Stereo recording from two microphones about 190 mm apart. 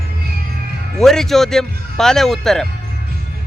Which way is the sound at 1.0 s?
Centre (ahead or behind).